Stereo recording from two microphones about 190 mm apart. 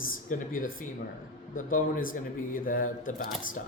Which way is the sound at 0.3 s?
45° left (ahead or behind).